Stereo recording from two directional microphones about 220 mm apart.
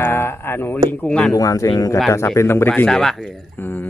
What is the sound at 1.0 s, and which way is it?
Speech, 5° left (ahead or behind).